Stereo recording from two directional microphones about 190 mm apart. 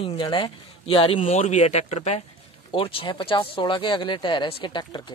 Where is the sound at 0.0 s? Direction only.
30° left (ahead or behind).